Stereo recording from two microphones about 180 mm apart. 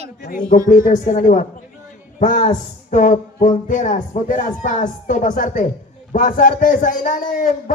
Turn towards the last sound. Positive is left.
turn(degrees=50)  # may be behind; listen again after turning